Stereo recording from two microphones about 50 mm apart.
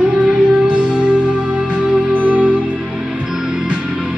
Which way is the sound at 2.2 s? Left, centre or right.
Right.